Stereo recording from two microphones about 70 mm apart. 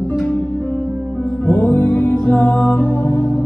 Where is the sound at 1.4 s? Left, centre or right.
Left.